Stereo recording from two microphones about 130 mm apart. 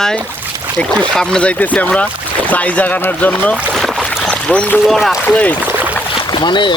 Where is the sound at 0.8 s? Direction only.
5° left (ahead or behind).